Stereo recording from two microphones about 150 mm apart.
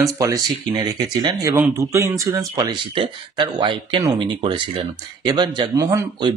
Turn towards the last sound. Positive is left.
turn(degrees=-25)  # may be behind; listen again after turning